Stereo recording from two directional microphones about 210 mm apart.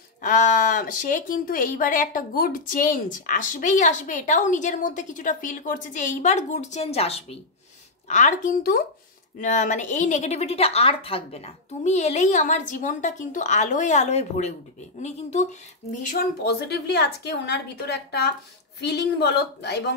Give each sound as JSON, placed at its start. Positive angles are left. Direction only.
{"t": 0.2, "sound": "speech", "side_deg": 40}
{"t": 16.4, "sound": "a woman's voice", "side_deg": 50}